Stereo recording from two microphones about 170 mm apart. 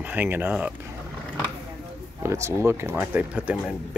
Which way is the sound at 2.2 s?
15° right (ahead or behind).